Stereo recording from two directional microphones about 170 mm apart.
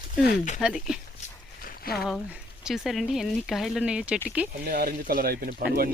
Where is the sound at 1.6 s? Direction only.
60° left (ahead or behind).